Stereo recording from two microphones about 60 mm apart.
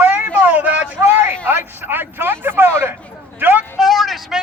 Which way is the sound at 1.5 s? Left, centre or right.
Right.